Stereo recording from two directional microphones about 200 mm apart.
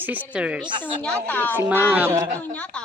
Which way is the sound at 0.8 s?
5° left (ahead or behind).